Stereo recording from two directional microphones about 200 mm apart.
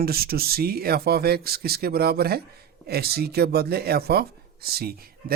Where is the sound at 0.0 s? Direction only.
50° right (ahead or behind).